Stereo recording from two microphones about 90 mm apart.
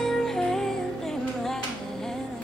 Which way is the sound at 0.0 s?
5° left (ahead or behind).